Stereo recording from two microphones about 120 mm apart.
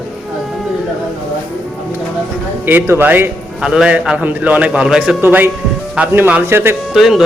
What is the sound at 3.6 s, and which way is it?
A man's voice, 5° right (ahead or behind).